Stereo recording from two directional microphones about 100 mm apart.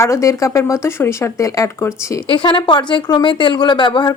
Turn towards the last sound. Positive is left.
turn(degrees=50)  # may be behind; listen again after turning